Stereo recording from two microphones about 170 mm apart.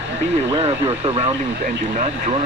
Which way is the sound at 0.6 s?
35° right (ahead or behind).